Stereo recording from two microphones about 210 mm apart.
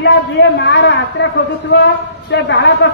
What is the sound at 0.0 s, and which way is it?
A man's voice, 55° left (ahead or behind).